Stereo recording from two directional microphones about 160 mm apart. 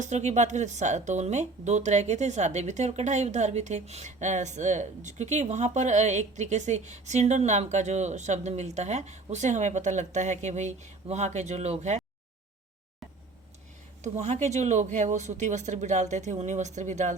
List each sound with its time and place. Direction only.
0.0 s speech: 45° right (ahead or behind)
14.0 s speech: 45° right (ahead or behind)